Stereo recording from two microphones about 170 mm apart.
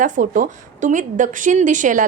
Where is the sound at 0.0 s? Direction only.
50° right (ahead or behind).